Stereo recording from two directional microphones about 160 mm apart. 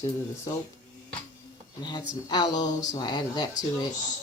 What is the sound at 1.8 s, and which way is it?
Speech, 25° left (ahead or behind).